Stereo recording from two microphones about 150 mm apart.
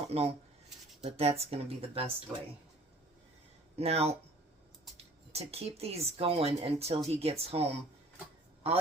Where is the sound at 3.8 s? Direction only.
40° right (ahead or behind).